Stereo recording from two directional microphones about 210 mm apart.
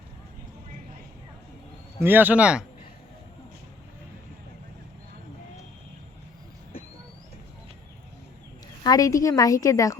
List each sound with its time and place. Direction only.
2.0 s a man's voice: 10° right (ahead or behind)
8.8 s a woman's voice: 15° left (ahead or behind)